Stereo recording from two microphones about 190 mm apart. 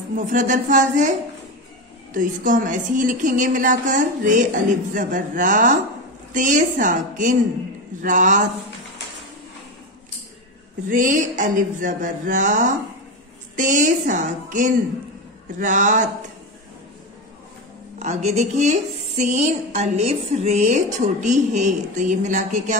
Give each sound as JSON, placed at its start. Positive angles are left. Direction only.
{"t": 0.1, "sound": "speech", "side_deg": -45}
{"t": 2.1, "sound": "a woman's voice", "side_deg": -45}
{"t": 10.9, "sound": "a woman's voice", "side_deg": -45}
{"t": 17.9, "sound": "speech", "side_deg": -35}